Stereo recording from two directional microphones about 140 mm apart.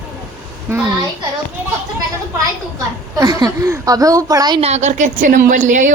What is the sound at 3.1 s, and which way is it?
A woman's voice, 25° right (ahead or behind).